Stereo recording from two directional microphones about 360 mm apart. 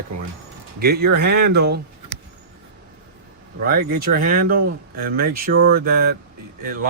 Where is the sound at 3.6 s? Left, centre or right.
Right.